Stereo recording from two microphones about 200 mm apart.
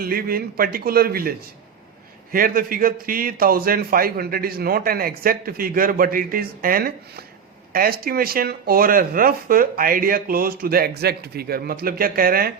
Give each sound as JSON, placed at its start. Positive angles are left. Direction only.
{"t": 0.0, "sound": "speech", "side_deg": -50}
{"t": 2.3, "sound": "speech", "side_deg": -45}